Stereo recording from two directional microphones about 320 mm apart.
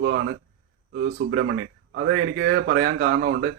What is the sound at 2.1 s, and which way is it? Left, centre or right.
Speech, right.